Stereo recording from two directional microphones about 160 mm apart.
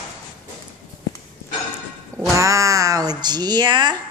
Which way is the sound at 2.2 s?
20° right (ahead or behind).